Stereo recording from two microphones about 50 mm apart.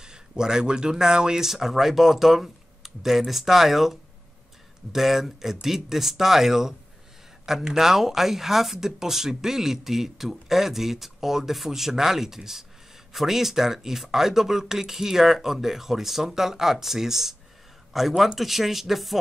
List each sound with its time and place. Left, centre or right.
0.0 s speech: centre